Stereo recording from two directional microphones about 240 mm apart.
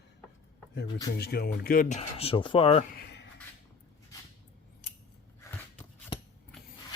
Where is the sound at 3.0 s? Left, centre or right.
Left.